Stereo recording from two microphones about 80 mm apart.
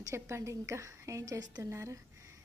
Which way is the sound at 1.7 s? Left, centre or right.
Right.